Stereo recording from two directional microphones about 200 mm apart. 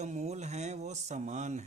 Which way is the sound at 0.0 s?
35° right (ahead or behind).